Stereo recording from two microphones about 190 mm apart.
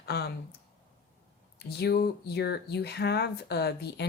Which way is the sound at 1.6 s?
55° left (ahead or behind).